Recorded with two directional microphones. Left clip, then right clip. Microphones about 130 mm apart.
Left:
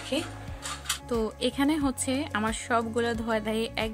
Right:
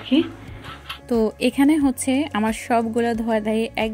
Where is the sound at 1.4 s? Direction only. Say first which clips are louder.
Right 8 dB; 25° right (ahead or behind).